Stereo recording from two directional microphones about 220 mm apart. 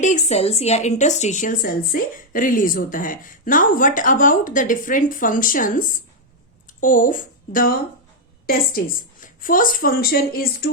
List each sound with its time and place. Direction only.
0.0 s speech: 30° left (ahead or behind)
9.2 s speech: 40° left (ahead or behind)